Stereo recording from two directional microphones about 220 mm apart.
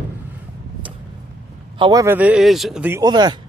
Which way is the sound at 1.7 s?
20° right (ahead or behind).